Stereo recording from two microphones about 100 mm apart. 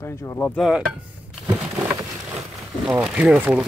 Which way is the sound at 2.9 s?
15° right (ahead or behind).